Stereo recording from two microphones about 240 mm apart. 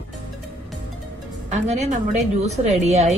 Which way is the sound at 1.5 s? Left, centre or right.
Right.